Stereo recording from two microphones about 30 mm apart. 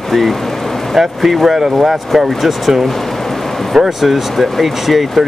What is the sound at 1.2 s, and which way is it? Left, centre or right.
Speech, centre.